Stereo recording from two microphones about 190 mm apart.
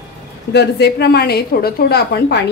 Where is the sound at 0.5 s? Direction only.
60° left (ahead or behind).